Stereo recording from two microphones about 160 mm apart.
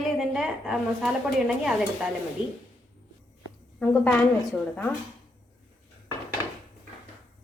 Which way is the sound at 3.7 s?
10° left (ahead or behind).